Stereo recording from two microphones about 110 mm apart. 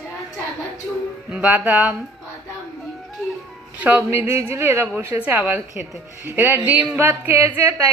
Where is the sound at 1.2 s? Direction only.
15° right (ahead or behind).